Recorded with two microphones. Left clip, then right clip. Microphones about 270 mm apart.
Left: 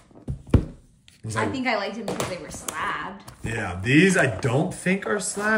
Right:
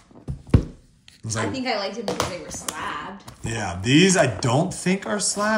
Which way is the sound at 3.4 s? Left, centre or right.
Centre.